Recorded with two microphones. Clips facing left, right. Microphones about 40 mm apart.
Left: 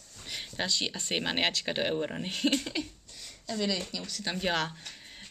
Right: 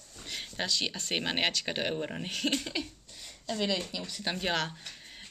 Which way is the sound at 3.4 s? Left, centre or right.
Right.